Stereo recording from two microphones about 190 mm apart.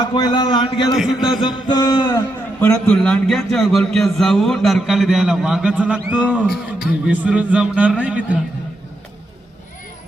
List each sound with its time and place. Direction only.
0.0 s a man's voice: 20° left (ahead or behind)
0.9 s a man's voice: centre (ahead or behind)
1.4 s a man's voice: 25° left (ahead or behind)
2.8 s a man's voice: 5° left (ahead or behind)